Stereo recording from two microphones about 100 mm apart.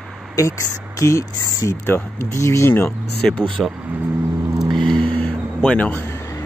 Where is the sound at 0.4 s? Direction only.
30° left (ahead or behind).